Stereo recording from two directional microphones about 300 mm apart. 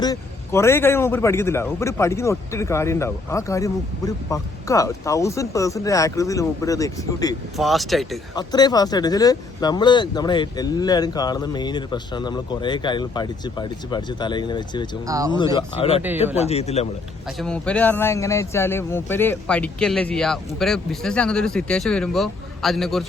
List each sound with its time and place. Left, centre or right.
0.0 s a man's voice: centre
7.5 s speech: centre
8.4 s a man's voice: centre
15.0 s speech: centre
15.3 s a man's voice: centre
17.2 s speech: centre